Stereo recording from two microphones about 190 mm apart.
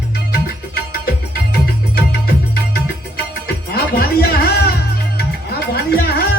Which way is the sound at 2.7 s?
55° left (ahead or behind).